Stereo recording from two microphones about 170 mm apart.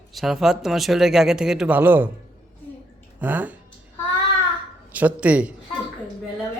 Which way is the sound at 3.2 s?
10° right (ahead or behind).